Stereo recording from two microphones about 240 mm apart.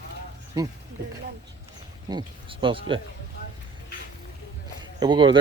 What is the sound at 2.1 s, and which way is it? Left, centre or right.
Speech, centre.